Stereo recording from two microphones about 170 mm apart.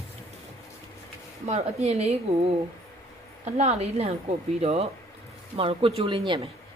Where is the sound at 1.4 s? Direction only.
40° right (ahead or behind).